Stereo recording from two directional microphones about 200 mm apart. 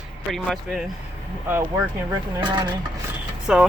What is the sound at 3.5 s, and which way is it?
Speech, 5° right (ahead or behind).